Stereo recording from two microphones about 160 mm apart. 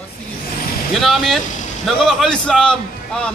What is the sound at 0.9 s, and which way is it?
Speech, centre (ahead or behind).